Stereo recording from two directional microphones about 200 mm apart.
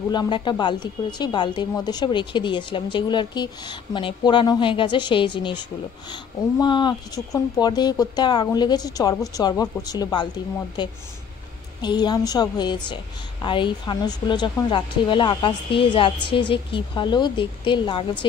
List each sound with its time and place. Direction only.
0.1 s speech: 20° left (ahead or behind)